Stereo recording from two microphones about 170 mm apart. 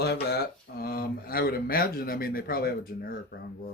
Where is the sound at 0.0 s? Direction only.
70° left (ahead or behind).